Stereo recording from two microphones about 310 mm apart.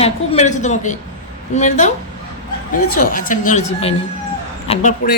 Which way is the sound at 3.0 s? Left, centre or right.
Left.